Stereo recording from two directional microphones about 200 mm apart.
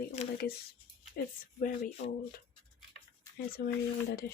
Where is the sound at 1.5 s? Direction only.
40° left (ahead or behind).